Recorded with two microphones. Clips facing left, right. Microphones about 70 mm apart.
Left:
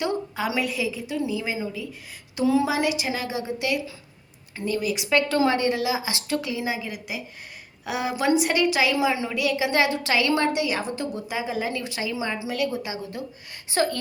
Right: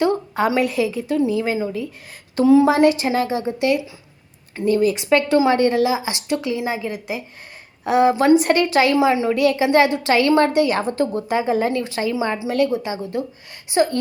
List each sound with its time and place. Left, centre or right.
0.0 s a woman's voice: right
8.4 s a woman's voice: right
9.0 s a woman's voice: right
9.3 s a woman's voice: right
11.7 s a woman's voice: right
13.7 s a woman's voice: right